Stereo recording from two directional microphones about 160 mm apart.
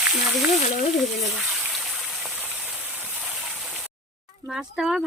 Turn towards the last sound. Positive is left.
turn(degrees=-5)  # may be behind; listen again after turning